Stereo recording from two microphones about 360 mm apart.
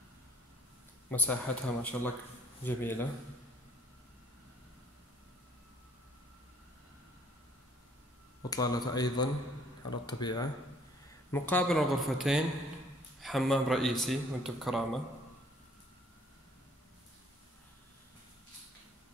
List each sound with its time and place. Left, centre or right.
1.1 s speech: centre
8.4 s speech: centre